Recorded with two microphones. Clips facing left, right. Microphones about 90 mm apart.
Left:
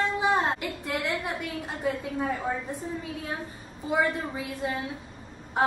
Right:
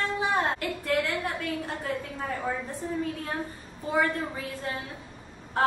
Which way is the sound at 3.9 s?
15° left (ahead or behind).